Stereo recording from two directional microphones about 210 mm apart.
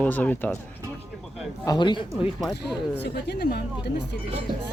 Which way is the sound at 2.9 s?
55° left (ahead or behind).